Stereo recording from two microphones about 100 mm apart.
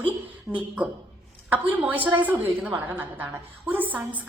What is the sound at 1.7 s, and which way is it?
A woman's voice, 15° right (ahead or behind).